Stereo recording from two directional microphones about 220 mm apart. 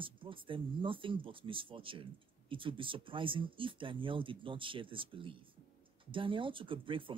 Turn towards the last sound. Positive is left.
turn(degrees=-25)  # may be behind; listen again after turning